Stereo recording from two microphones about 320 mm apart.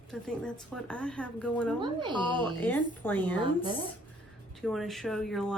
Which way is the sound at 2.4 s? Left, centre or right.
Centre.